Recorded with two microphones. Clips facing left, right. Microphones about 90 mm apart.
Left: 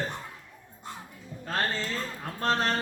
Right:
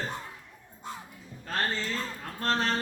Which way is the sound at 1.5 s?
15° left (ahead or behind).